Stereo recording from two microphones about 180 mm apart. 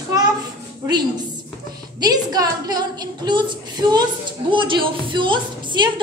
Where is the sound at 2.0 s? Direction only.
20° right (ahead or behind).